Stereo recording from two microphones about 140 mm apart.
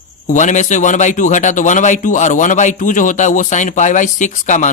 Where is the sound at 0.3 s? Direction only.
60° left (ahead or behind).